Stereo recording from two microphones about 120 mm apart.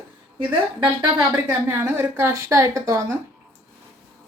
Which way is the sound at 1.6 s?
25° right (ahead or behind).